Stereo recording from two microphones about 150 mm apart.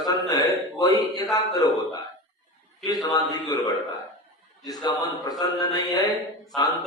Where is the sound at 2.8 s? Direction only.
25° left (ahead or behind).